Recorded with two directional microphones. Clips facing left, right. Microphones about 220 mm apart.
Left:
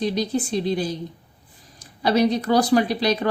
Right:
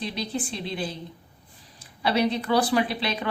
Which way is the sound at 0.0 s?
40° left (ahead or behind).